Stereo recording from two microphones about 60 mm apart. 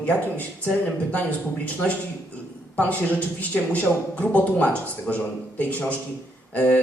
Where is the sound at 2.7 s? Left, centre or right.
Left.